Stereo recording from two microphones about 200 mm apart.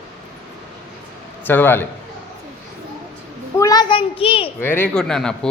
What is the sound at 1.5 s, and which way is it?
Speech, 10° left (ahead or behind).